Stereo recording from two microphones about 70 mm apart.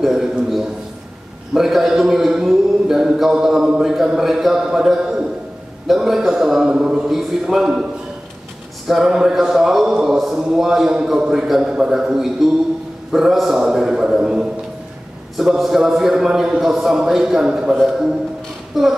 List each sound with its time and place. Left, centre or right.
0.0 s a sound: centre
1.5 s a man's voice: centre
8.8 s a man's voice: centre